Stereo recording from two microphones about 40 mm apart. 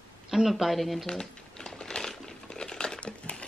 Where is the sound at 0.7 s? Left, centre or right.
Centre.